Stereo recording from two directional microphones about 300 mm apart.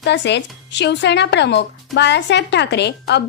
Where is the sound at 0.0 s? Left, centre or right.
Left.